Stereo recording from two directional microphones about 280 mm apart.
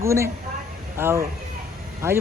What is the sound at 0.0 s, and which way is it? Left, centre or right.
Speech, centre.